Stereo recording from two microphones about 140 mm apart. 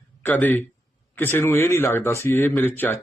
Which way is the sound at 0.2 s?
10° left (ahead or behind).